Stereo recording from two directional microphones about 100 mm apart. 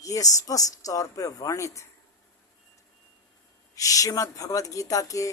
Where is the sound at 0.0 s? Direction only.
35° left (ahead or behind).